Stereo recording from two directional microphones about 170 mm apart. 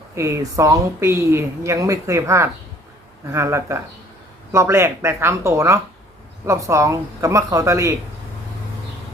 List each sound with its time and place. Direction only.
0.2 s a woman's voice: 15° right (ahead or behind)